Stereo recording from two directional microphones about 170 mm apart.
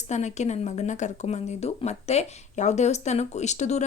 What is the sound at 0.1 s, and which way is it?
A woman's voice, 45° left (ahead or behind).